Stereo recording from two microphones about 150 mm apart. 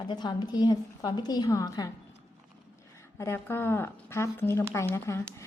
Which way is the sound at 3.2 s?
15° left (ahead or behind).